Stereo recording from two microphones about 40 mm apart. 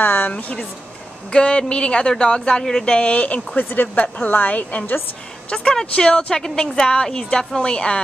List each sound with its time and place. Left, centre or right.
0.0 s a sound: left
0.3 s a woman's voice: left
3.5 s a woman's voice: left
5.5 s a woman's voice: left